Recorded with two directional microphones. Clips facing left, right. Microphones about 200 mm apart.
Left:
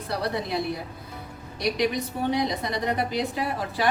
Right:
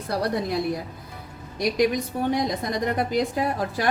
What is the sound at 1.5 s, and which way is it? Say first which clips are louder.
A woman's voice: right 3 dB; 50° right (ahead or behind).